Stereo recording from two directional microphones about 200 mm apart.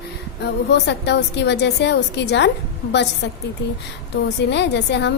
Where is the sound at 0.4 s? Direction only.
60° left (ahead or behind).